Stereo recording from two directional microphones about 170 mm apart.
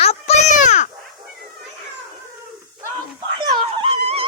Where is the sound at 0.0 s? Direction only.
40° left (ahead or behind).